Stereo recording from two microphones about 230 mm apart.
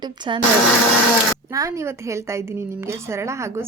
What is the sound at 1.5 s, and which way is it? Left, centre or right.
A woman's voice, centre.